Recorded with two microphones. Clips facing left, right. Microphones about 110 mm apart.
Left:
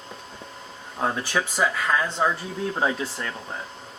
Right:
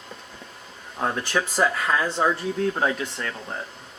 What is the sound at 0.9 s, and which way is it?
Speech, 10° left (ahead or behind).